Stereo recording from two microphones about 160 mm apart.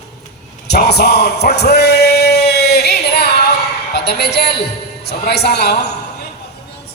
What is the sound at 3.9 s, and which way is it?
A woman's voice, 90° left.